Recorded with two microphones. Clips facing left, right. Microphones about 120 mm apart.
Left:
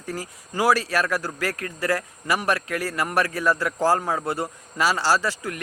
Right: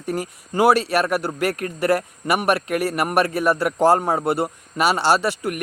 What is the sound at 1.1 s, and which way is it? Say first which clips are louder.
Speech: right 5 dB; 25° right (ahead or behind).